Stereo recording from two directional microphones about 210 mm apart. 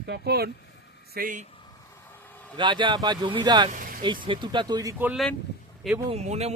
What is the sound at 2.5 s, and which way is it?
Speech, 20° right (ahead or behind).